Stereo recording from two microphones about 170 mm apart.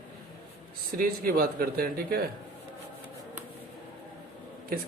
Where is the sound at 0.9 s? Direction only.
60° right (ahead or behind).